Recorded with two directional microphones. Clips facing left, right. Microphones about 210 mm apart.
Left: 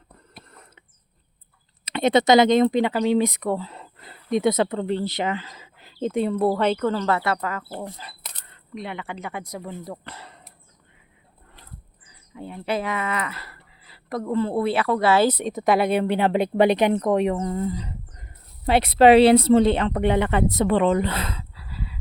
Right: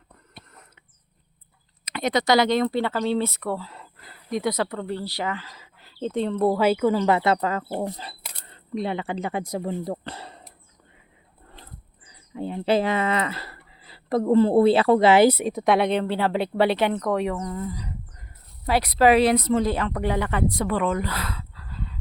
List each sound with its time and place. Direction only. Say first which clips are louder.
1.8 s speech: left 5 dB; 25° left (ahead or behind); by 6.7 s 5° left (ahead or behind)
6.7 s speech: right 2 dB; 10° right (ahead or behind); by 7.8 s 25° right (ahead or behind)
7.8 s speech: right 5 dB; 35° right (ahead or behind)
12.0 s a sound: right 6 dB; 30° right (ahead or behind)
12.5 s speech: right 5 dB; 30° right (ahead or behind); by 21.4 s 25° left (ahead or behind)
21.5 s a sound: left 1 dB; 10° left (ahead or behind)